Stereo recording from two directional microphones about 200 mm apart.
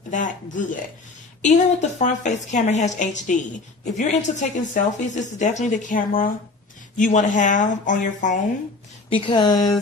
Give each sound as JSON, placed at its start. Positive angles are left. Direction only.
{"t": 0.1, "sound": "speech", "side_deg": 40}
{"t": 9.0, "sound": "speech", "side_deg": 25}